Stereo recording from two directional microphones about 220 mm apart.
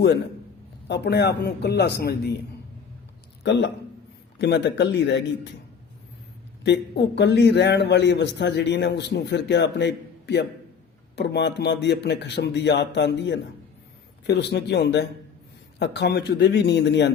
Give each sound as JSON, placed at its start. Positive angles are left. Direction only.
{"t": 0.9, "sound": "a man's voice", "side_deg": 50}
{"t": 3.4, "sound": "a man's voice", "side_deg": 50}
{"t": 6.7, "sound": "a man's voice", "side_deg": 50}